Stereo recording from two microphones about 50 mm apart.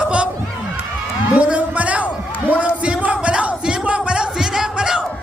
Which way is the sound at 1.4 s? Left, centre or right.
Right.